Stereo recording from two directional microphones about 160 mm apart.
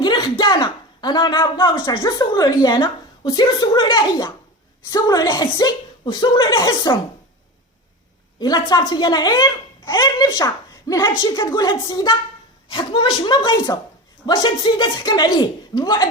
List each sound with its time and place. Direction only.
0.0 s a sound: 25° left (ahead or behind)
1.8 s a child's voice: 25° left (ahead or behind)
8.4 s a child's voice: 25° left (ahead or behind)